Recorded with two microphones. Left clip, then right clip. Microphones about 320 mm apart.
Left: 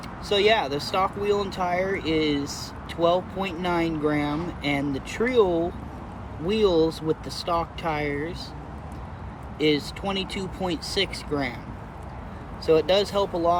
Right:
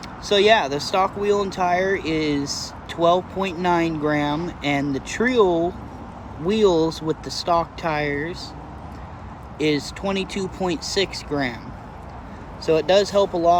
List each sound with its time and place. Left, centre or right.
0.3 s speech: centre
6.5 s speech: centre
9.6 s speech: centre
12.6 s speech: centre